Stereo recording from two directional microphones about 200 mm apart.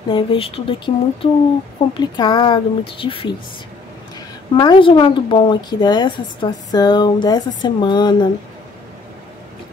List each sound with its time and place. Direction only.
0.1 s a woman's voice: 25° left (ahead or behind)
4.6 s a woman's voice: 25° left (ahead or behind)